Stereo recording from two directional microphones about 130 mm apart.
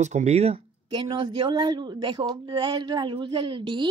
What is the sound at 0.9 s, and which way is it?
Speech, 35° right (ahead or behind).